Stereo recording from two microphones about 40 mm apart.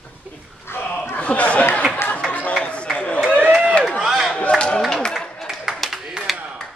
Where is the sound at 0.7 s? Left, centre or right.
Left.